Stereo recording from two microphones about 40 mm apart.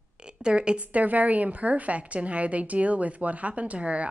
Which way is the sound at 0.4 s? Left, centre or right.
Right.